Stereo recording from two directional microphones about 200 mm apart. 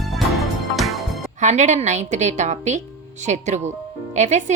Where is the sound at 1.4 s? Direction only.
35° right (ahead or behind).